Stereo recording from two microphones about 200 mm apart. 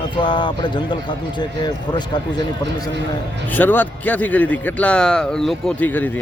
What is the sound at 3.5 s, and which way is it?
Speech, 10° left (ahead or behind).